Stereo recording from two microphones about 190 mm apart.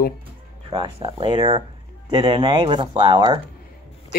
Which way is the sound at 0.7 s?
30° right (ahead or behind).